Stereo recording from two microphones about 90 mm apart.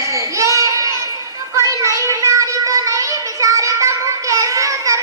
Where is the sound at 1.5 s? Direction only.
35° right (ahead or behind).